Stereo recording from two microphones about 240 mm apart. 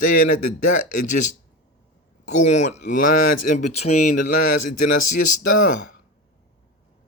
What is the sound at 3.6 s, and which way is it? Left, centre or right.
Speech, left.